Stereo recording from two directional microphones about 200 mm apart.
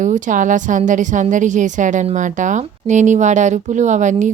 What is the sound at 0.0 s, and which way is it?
A woman's voice, 40° right (ahead or behind).